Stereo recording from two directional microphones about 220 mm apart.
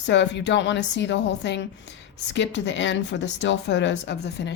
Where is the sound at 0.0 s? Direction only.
55° left (ahead or behind).